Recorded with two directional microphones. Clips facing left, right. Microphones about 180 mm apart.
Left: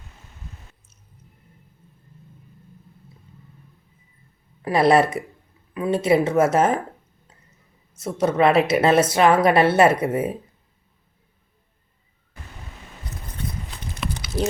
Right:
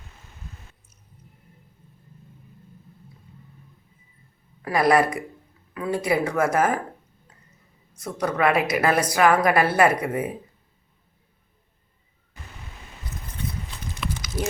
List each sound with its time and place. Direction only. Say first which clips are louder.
4.6 s a woman's voice: left 3 dB; 25° left (ahead or behind)
7.9 s a woman's voice: left 5 dB; 25° left (ahead or behind)